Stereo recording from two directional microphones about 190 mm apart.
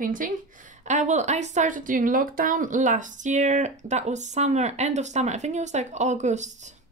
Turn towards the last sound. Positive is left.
turn(degrees=-40)  # may be behind; listen again after turning